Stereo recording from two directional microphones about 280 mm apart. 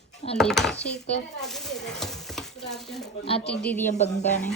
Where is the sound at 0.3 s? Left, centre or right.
Centre.